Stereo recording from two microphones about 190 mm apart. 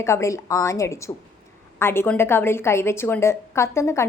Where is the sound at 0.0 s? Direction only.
15° left (ahead or behind).